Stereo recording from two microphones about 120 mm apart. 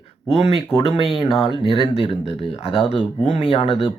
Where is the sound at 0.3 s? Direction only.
55° left (ahead or behind).